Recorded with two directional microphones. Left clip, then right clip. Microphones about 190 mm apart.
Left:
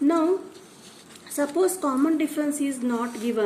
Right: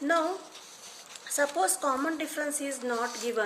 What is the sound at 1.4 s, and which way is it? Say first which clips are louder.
A woman's voice: left 4 dB; 25° right (ahead or behind).